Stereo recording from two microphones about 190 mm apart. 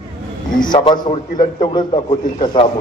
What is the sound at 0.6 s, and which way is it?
A man's voice, 25° left (ahead or behind).